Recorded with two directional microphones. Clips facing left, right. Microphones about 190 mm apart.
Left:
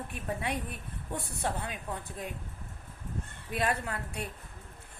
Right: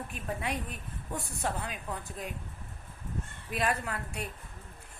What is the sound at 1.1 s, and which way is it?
A woman's voice, 25° left (ahead or behind).